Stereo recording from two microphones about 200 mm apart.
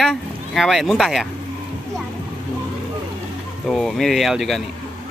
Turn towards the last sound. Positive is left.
turn(degrees=0)  # may be behind; listen again after turning